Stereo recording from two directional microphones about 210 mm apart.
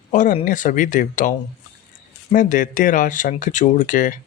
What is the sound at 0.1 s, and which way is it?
Speech, 35° left (ahead or behind).